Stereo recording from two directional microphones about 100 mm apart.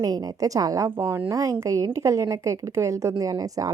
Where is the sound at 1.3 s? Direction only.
35° right (ahead or behind).